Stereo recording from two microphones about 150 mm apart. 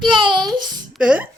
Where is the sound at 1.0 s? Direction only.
10° right (ahead or behind).